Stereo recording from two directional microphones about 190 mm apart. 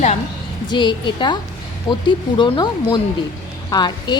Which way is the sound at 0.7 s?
25° left (ahead or behind).